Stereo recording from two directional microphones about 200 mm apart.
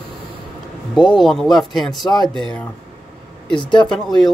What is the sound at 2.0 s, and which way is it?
Speech, 20° left (ahead or behind).